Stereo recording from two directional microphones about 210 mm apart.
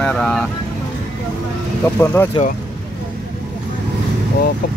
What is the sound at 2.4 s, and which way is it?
Speech, 25° left (ahead or behind).